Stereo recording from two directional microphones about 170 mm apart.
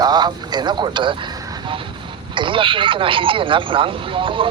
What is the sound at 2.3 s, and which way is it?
Speech, 30° right (ahead or behind).